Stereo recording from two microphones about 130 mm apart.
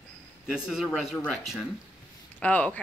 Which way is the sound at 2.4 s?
10° left (ahead or behind).